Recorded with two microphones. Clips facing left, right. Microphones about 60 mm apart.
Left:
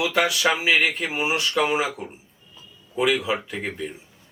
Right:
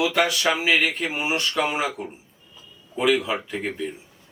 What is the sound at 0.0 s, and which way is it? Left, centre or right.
Speech, centre.